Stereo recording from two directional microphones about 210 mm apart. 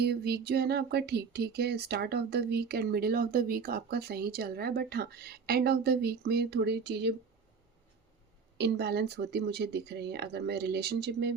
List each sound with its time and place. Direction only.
0.0 s speech: 50° right (ahead or behind)
8.5 s speech: 50° right (ahead or behind)